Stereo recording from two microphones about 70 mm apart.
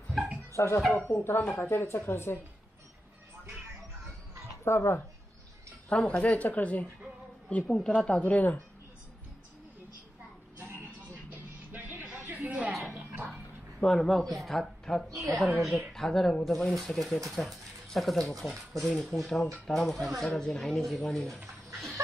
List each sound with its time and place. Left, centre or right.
0.1 s dog: centre
0.6 s speech: left
4.6 s speech: left
5.9 s a woman's voice: centre
11.7 s music: right
12.9 s a sound: right
13.8 s speech: centre